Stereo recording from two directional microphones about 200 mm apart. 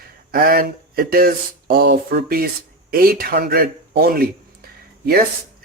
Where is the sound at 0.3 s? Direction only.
45° right (ahead or behind).